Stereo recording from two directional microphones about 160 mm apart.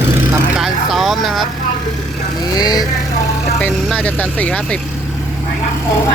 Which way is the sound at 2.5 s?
25° left (ahead or behind).